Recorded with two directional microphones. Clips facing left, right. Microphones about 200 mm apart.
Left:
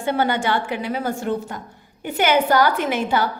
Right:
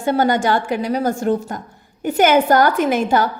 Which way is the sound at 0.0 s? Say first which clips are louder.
Right 4 dB; 40° right (ahead or behind).